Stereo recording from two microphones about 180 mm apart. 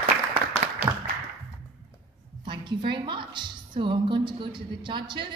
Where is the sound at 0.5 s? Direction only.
35° left (ahead or behind).